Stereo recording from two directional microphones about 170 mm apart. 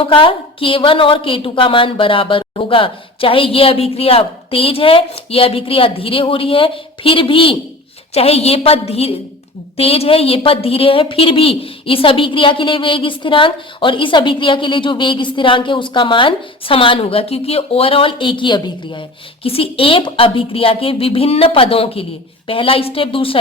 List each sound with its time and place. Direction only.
0.0 s a woman's voice: 30° left (ahead or behind)